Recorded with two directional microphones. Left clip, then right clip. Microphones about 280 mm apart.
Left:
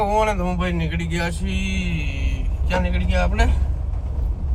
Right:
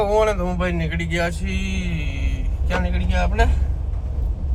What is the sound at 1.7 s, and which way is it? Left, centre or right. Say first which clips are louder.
Mantra: left 2 dB; left.